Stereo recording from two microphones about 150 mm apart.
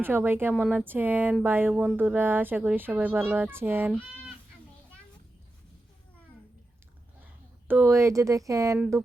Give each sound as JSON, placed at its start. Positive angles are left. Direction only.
{"t": 0.0, "sound": "speech", "side_deg": -15}
{"t": 7.7, "sound": "speech", "side_deg": -15}